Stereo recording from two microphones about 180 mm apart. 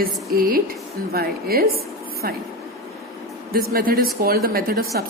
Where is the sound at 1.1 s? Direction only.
60° right (ahead or behind).